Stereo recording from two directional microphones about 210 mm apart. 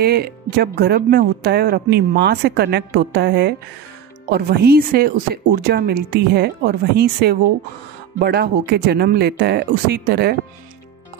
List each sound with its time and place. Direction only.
0.0 s speech: 50° right (ahead or behind)